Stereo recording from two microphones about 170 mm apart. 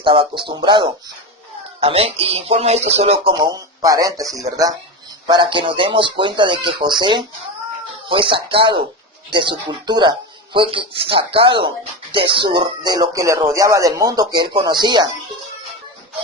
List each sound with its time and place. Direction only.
0.0 s speech: 30° right (ahead or behind)